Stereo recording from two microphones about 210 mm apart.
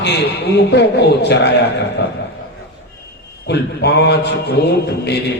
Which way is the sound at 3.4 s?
50° left (ahead or behind).